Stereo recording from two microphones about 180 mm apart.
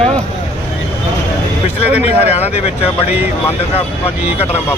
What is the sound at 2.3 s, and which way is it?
Speech, 35° left (ahead or behind).